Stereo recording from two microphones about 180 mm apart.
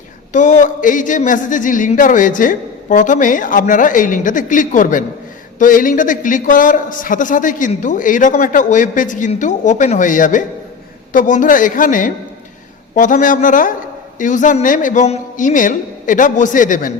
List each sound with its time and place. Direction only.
0.3 s a man's voice: 45° left (ahead or behind)